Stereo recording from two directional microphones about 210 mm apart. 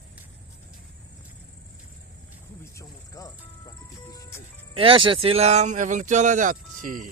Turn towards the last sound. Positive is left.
turn(degrees=-40)  # may be behind; listen again after turning